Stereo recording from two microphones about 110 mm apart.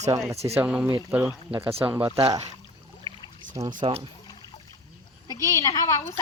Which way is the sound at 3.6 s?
50° right (ahead or behind).